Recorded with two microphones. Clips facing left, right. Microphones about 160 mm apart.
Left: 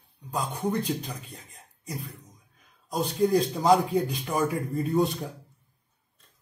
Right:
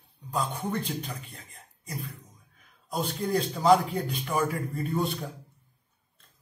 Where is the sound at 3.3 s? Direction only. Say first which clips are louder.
Right 2 dB; 15° left (ahead or behind).